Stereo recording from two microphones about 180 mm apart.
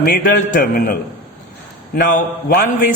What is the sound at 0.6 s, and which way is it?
A man's voice, 50° left (ahead or behind).